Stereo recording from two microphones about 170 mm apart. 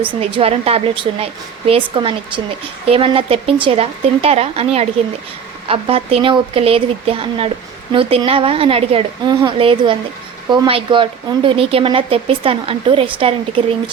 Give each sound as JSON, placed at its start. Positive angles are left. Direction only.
{"t": 0.1, "sound": "speech", "side_deg": -30}